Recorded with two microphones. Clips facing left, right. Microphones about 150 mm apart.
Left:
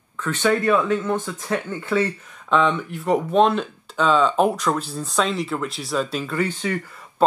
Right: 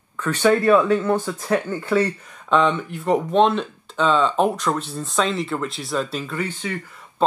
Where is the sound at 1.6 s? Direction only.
10° right (ahead or behind).